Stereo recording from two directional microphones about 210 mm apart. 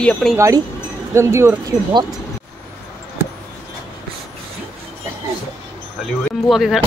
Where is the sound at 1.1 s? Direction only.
10° right (ahead or behind).